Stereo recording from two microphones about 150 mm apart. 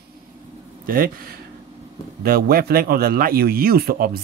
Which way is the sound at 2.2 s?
90° right.